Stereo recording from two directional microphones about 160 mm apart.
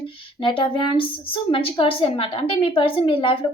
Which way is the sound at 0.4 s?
30° left (ahead or behind).